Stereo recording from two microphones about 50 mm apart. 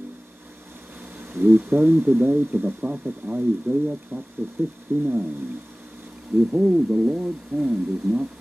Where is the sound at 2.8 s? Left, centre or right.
Right.